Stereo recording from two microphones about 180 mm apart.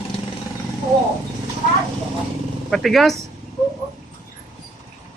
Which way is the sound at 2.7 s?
Centre (ahead or behind).